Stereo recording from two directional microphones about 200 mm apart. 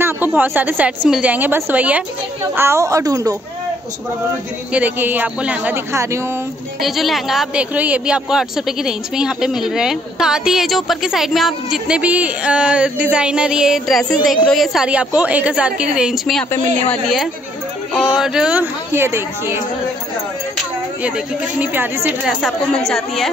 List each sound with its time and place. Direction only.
0.0 s a woman's voice: 10° right (ahead or behind)
4.7 s a woman's voice: 10° right (ahead or behind)
6.8 s speech: centre (ahead or behind)
16.5 s a woman's voice: 35° right (ahead or behind)
16.9 s a woman's voice: centre (ahead or behind)
22.3 s speech: centre (ahead or behind)